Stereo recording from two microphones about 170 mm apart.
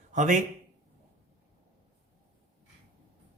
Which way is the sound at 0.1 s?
45° right (ahead or behind).